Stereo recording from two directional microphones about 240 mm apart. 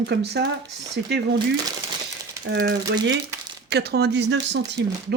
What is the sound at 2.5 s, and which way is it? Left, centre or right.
Speech, right.